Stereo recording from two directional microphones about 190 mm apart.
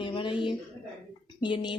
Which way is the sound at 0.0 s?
25° left (ahead or behind).